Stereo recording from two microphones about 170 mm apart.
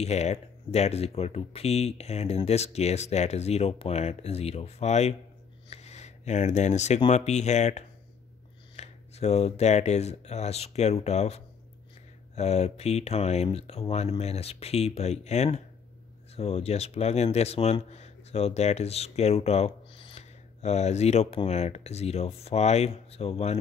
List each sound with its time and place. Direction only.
0.0 s speech: 40° left (ahead or behind)
5.7 s a sound: 40° left (ahead or behind)
7.1 s speech: 40° left (ahead or behind)